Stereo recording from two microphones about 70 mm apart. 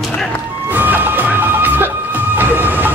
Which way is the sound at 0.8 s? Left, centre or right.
Right.